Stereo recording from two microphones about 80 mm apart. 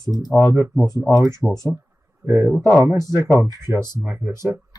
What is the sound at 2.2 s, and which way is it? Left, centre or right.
Speech, right.